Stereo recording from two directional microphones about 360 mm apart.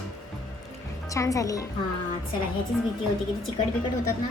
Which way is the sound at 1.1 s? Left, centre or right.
Centre.